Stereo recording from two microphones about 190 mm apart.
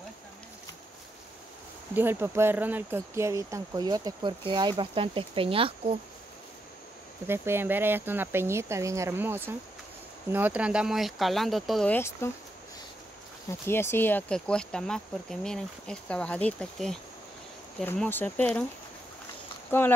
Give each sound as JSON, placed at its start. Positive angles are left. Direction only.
{"t": 2.0, "sound": "speech", "side_deg": -10}
{"t": 7.2, "sound": "speech", "side_deg": -10}
{"t": 13.7, "sound": "speech", "side_deg": 10}
{"t": 19.7, "sound": "speech", "side_deg": 10}